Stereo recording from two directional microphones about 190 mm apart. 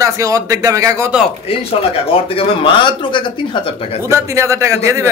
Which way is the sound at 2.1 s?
30° left (ahead or behind).